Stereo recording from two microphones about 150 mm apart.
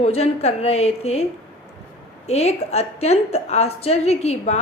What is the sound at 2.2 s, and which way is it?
A woman's voice, 45° left (ahead or behind).